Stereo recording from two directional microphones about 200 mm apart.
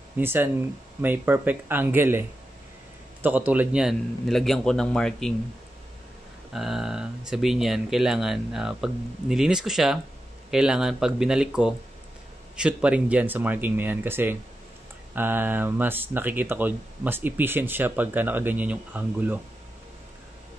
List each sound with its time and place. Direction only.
0.2 s speech: 10° right (ahead or behind)
6.5 s speech: centre (ahead or behind)